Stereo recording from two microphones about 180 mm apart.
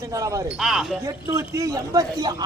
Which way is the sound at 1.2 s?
15° right (ahead or behind).